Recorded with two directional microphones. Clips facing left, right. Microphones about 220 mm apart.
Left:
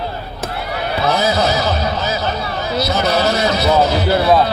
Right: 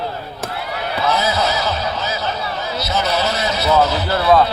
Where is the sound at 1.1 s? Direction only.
50° left (ahead or behind).